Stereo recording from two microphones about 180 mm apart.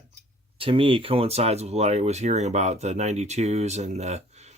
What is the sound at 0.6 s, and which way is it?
Speech, 30° right (ahead or behind).